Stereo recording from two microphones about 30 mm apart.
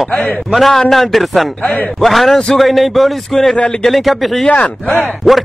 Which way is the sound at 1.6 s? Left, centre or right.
Left.